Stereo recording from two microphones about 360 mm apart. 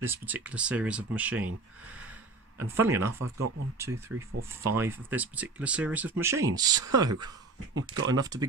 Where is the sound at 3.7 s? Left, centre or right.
Centre.